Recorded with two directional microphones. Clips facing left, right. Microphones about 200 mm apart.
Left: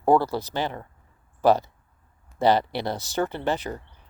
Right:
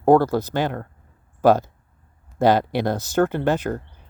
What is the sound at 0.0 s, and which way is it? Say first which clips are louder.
Speech: right 5 dB; 45° right (ahead or behind).